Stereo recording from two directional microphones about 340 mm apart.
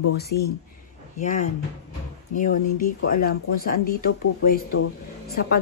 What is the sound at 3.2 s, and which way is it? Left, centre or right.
A woman's voice, left.